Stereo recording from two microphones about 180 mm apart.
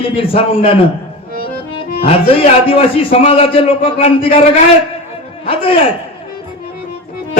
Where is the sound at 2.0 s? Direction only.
30° left (ahead or behind).